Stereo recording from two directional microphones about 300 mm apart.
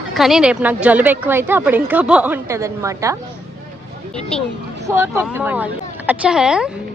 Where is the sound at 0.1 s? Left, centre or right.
Centre.